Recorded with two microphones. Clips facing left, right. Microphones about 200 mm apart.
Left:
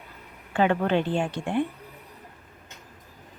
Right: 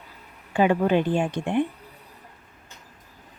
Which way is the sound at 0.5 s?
10° right (ahead or behind).